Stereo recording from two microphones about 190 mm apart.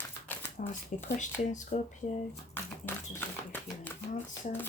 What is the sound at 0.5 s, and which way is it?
Speech, 40° left (ahead or behind).